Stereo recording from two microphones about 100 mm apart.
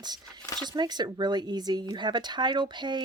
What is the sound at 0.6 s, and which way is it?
Speech, 45° right (ahead or behind).